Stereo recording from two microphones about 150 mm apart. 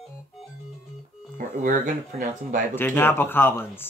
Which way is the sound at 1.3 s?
65° right (ahead or behind).